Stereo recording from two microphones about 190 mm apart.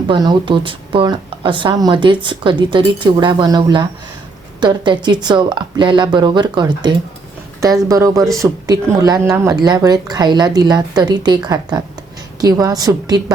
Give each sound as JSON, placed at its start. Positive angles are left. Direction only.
{"t": 0.1, "sound": "speech", "side_deg": -25}